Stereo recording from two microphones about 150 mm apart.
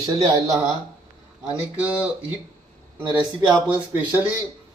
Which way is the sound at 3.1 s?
30° right (ahead or behind).